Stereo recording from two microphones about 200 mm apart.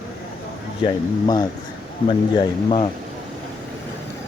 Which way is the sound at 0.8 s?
20° left (ahead or behind).